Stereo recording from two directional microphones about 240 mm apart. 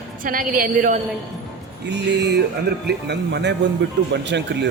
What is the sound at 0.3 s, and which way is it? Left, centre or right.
Speech, right.